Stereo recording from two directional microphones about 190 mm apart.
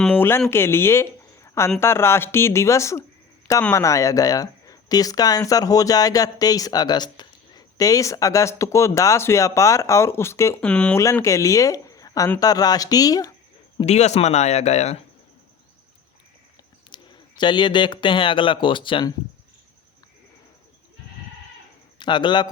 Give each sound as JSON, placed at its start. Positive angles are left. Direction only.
{"t": 0.0, "sound": "speech", "side_deg": 10}
{"t": 13.7, "sound": "speech", "side_deg": 35}
{"t": 16.9, "sound": "speech", "side_deg": 25}
{"t": 21.9, "sound": "a man's voice", "side_deg": 25}